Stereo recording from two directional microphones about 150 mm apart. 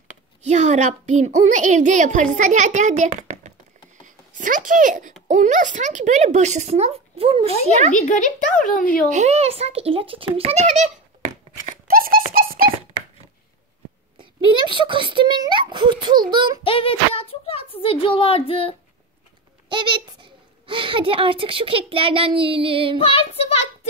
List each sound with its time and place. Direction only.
0.4 s a child's voice: 50° right (ahead or behind)
7.9 s speech: 55° left (ahead or behind)
9.1 s a child's voice: 50° right (ahead or behind)
11.9 s dog: 75° right (ahead or behind)
14.1 s a child's voice: 30° right (ahead or behind)
16.6 s a woman's voice: 35° left (ahead or behind)
19.7 s a child's voice: 30° right (ahead or behind)
22.9 s a woman's voice: 40° left (ahead or behind)